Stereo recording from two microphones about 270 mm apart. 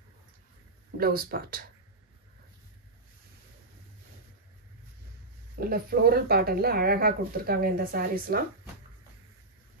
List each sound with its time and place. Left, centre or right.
0.9 s speech: right
5.6 s speech: right